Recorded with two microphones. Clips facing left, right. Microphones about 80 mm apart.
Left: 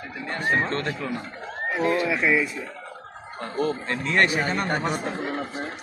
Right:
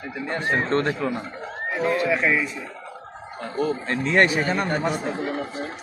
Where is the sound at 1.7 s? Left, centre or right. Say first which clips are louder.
Right 1 dB; centre.